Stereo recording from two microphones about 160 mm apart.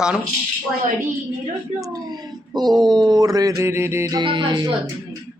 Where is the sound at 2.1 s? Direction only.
25° right (ahead or behind).